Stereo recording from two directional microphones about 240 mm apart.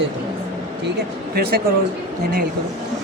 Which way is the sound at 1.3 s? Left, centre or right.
Right.